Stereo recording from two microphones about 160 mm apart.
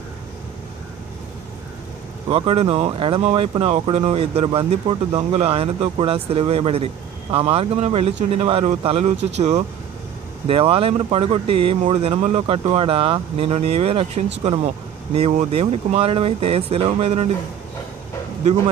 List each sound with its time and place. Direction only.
2.2 s speech: 35° right (ahead or behind)